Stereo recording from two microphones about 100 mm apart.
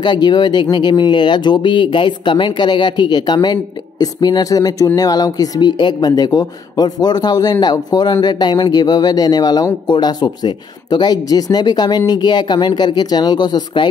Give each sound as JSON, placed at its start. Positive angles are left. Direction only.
{"t": 0.0, "sound": "speech", "side_deg": 45}